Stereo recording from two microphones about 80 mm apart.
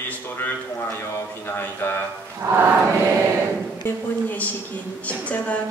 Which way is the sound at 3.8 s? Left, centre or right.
Centre.